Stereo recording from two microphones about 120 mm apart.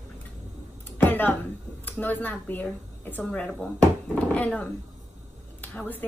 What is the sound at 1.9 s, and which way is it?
A woman's voice, 15° left (ahead or behind).